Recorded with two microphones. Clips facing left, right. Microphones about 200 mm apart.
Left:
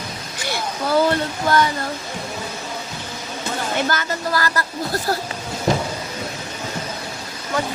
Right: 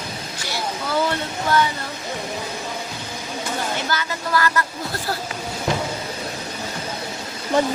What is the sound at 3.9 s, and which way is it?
Speech, 45° left (ahead or behind).